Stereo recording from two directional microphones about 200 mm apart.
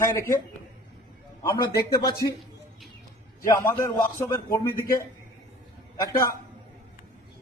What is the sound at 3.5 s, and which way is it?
Speech, 15° left (ahead or behind).